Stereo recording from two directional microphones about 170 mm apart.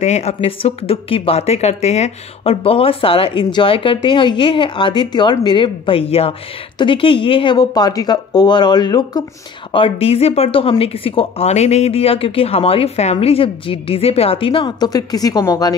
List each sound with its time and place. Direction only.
0.0 s speech: 40° left (ahead or behind); by 15.7 s 20° left (ahead or behind)